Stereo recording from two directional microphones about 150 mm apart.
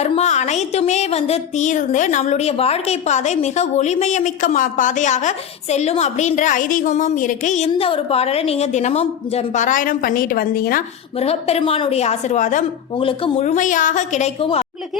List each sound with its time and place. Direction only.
0.0 s a woman's voice: 45° left (ahead or behind)
7.7 s speech: 35° left (ahead or behind); by 10.8 s 75° left (ahead or behind)
11.2 s speech: 45° left (ahead or behind)
13.0 s speech: 35° left (ahead or behind)
13.4 s a woman's voice: 55° left (ahead or behind)